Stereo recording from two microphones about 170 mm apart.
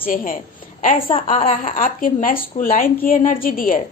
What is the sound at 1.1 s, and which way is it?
A woman's voice, 40° left (ahead or behind).